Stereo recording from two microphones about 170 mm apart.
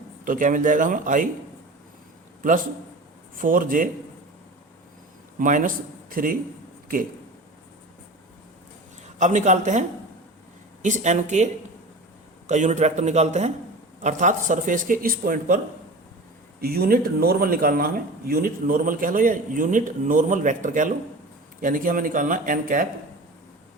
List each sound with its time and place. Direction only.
0.3 s speech: 50° right (ahead or behind)
3.4 s speech: 55° right (ahead or behind)
5.4 s speech: 50° right (ahead or behind)
9.1 s speech: 45° right (ahead or behind)
10.8 s speech: 45° right (ahead or behind)
12.5 s speech: 45° right (ahead or behind)